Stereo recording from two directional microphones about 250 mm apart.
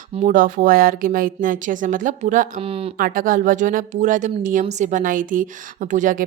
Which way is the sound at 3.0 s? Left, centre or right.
Right.